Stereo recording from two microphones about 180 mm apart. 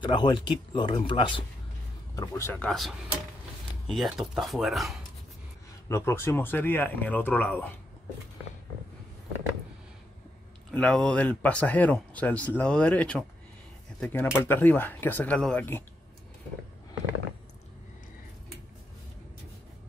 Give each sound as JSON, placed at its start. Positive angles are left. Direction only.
{"t": 0.0, "sound": "speech", "side_deg": 25}
{"t": 2.1, "sound": "speech", "side_deg": 15}
{"t": 5.9, "sound": "speech", "side_deg": 15}
{"t": 10.7, "sound": "speech", "side_deg": 5}